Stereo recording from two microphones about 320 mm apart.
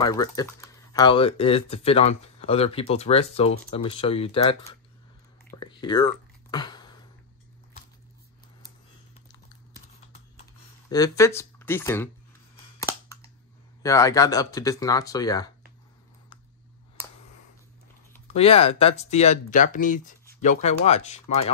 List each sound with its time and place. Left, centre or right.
0.0 s speech: centre
5.5 s a sound: centre
10.9 s speech: centre
12.7 s a sound: centre
13.8 s speech: centre
18.2 s speech: centre